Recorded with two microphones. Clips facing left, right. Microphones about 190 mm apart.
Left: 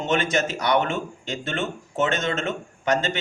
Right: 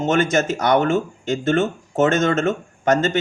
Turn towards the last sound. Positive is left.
turn(degrees=-45)  # may be behind; listen again after turning